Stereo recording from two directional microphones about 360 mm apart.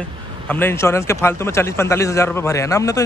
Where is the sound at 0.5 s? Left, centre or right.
Centre.